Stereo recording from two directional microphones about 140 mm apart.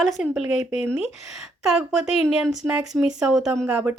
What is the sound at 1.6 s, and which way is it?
A child's voice, 5° right (ahead or behind).